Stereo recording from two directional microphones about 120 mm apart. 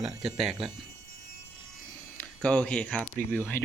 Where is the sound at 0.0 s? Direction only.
5° right (ahead or behind).